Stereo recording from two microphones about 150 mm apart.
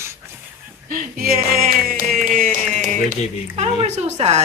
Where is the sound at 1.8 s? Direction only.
70° right (ahead or behind).